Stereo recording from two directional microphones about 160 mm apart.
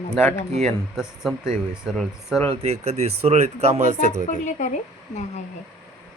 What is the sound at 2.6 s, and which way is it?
Speech, 45° right (ahead or behind).